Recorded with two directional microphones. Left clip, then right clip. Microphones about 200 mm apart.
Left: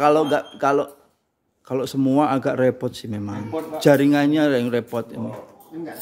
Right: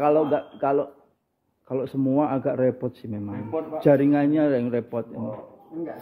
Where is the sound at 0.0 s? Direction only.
35° left (ahead or behind).